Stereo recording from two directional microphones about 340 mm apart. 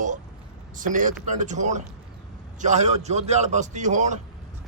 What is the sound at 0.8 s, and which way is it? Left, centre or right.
A man's voice, right.